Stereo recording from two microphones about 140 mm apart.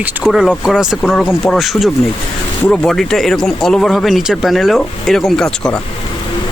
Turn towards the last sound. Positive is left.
turn(degrees=5)  # may be behind; listen again after turning